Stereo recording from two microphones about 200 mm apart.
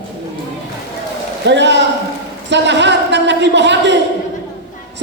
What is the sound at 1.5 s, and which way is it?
A man's voice, 60° right (ahead or behind).